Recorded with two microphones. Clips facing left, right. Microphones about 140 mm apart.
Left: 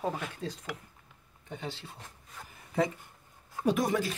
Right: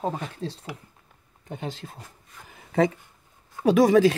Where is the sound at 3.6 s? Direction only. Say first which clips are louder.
Right 11 dB; 90° right.